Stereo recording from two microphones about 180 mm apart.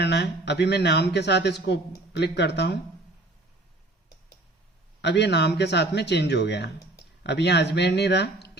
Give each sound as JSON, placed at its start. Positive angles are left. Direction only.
{"t": 0.0, "sound": "a man's voice", "side_deg": 70}
{"t": 5.0, "sound": "a man's voice", "side_deg": 70}